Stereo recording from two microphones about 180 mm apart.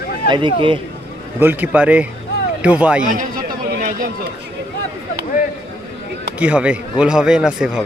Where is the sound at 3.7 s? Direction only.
50° right (ahead or behind).